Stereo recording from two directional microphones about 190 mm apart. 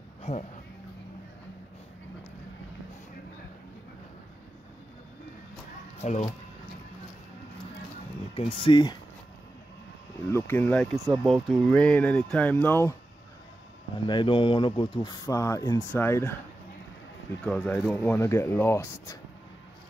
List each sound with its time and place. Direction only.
0.2 s a sound: 35° left (ahead or behind)
5.9 s speech: 40° left (ahead or behind)
8.6 s speech: 20° left (ahead or behind)
10.3 s speech: 10° left (ahead or behind)
14.0 s speech: 25° left (ahead or behind)
17.4 s speech: 5° left (ahead or behind)